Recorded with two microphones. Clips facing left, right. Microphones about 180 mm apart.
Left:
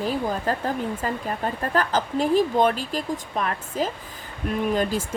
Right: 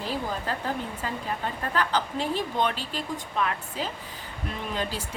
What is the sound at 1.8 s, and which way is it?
Speech, 45° left (ahead or behind).